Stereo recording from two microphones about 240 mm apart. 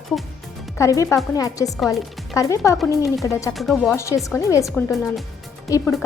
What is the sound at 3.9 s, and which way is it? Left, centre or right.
A woman's voice, centre.